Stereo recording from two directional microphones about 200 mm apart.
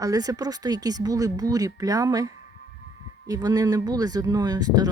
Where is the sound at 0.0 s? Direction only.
15° right (ahead or behind).